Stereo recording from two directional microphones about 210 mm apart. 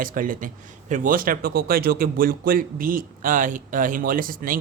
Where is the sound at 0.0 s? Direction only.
40° right (ahead or behind).